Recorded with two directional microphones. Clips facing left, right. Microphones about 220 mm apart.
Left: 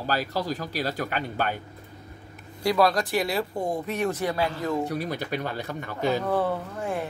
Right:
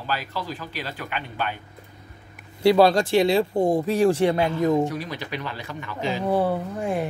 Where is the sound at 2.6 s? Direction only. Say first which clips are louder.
Right 6 dB; 30° right (ahead or behind).